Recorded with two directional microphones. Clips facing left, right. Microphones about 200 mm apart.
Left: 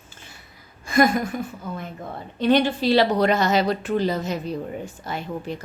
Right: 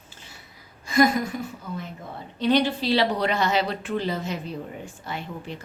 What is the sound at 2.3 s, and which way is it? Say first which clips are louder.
A woman's voice: left 2 dB; 50° left (ahead or behind).